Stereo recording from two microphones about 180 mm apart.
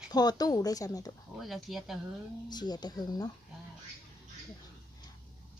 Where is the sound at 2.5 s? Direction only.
20° left (ahead or behind).